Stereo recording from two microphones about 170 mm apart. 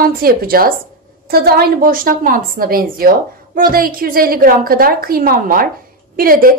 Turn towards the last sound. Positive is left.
turn(degrees=-60)  # may be behind; listen again after turning